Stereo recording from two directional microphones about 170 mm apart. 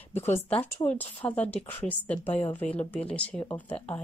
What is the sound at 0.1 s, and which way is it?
Speech, 15° left (ahead or behind).